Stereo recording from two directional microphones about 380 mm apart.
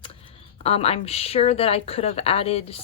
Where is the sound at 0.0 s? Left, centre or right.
Centre.